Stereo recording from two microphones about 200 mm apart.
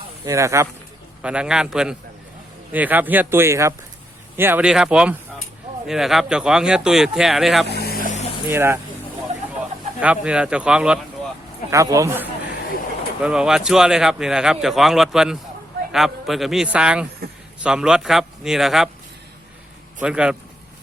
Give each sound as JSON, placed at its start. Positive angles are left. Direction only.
{"t": 0.3, "sound": "speech", "side_deg": -15}
{"t": 7.7, "sound": "vehicle", "side_deg": 55}
{"t": 8.4, "sound": "speech", "side_deg": -10}
{"t": 10.0, "sound": "speech", "side_deg": -5}
{"t": 11.7, "sound": "speech", "side_deg": -15}
{"t": 20.0, "sound": "speech", "side_deg": -5}